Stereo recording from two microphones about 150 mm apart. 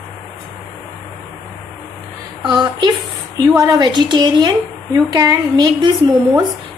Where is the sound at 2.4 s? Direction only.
30° right (ahead or behind).